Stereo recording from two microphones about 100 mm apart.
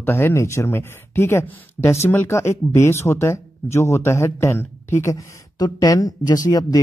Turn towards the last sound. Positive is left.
turn(degrees=35)  # may be behind; listen again after turning